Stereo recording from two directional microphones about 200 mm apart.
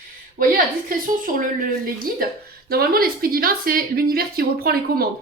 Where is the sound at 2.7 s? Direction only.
50° right (ahead or behind).